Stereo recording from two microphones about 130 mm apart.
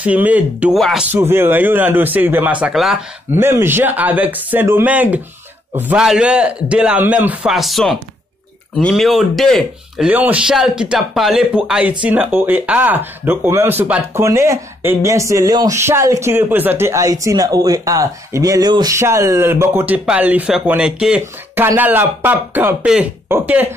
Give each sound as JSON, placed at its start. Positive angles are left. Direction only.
{"t": 0.0, "sound": "speech", "side_deg": -10}
{"t": 0.7, "sound": "speech", "side_deg": 0}
{"t": 1.3, "sound": "speech", "side_deg": -15}
{"t": 2.6, "sound": "speech", "side_deg": -5}
{"t": 3.3, "sound": "speech", "side_deg": -20}
{"t": 7.5, "sound": "speech", "side_deg": 0}
{"t": 10.0, "sound": "speech", "side_deg": -10}